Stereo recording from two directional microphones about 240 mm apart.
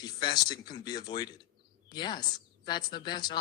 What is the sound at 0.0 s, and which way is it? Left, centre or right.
A man's voice, centre.